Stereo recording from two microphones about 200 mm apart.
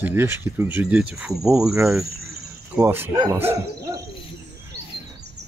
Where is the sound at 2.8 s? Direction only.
10° right (ahead or behind).